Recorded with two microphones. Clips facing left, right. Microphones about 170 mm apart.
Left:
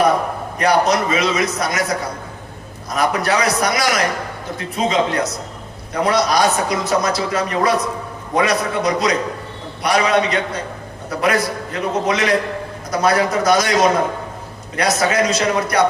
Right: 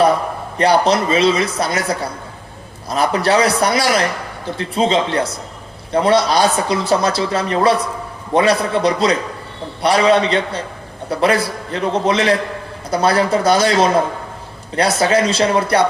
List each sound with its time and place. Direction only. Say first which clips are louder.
0.5 s a man's voice: right 2 dB; 30° right (ahead or behind)
14.8 s a man's voice: right 2 dB; 30° right (ahead or behind)